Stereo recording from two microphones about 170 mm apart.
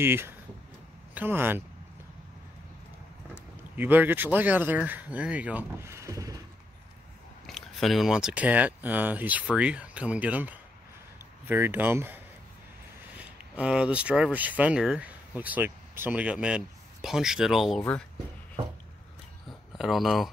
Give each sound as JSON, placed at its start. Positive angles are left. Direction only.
{"t": 0.0, "sound": "speech", "side_deg": -15}
{"t": 3.7, "sound": "speech", "side_deg": -10}
{"t": 7.4, "sound": "speech", "side_deg": 0}
{"t": 13.2, "sound": "speech", "side_deg": -5}
{"t": 19.8, "sound": "speech", "side_deg": 0}